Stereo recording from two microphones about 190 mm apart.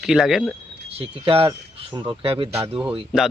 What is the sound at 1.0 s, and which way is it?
Speech, 30° right (ahead or behind).